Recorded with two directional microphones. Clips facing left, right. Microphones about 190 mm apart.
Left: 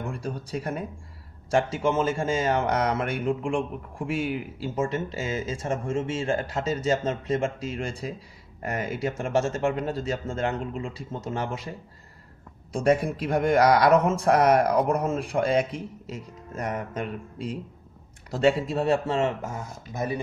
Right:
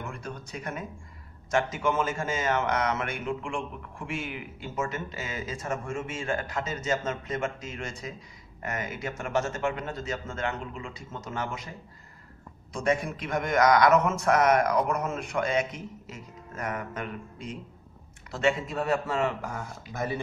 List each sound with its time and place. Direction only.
0.0 s a man's voice: 35° left (ahead or behind)
12.7 s a man's voice: 35° left (ahead or behind); by 20.2 s 20° left (ahead or behind)